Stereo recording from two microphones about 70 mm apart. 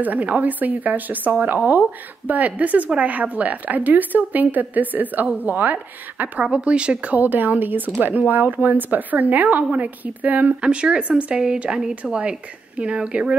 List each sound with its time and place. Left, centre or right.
0.0 s a woman's voice: right